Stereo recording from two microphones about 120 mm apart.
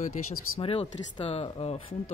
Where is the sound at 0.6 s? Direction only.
50° left (ahead or behind).